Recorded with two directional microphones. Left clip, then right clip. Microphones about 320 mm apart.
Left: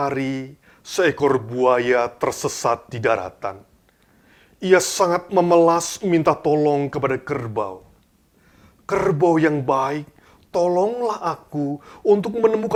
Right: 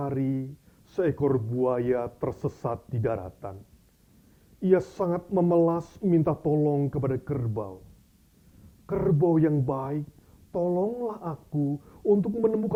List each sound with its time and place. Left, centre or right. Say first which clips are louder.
0.0 s speech: left 7 dB; centre
4.6 s speech: left 8 dB; centre
8.9 s speech: left 7 dB; centre
11.3 s speech: left 5 dB; centre